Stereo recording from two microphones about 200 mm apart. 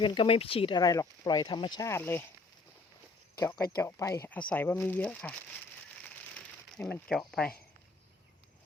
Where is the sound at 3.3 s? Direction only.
15° left (ahead or behind).